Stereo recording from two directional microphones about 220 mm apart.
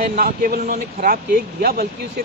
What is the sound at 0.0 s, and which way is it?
Speech, 40° right (ahead or behind).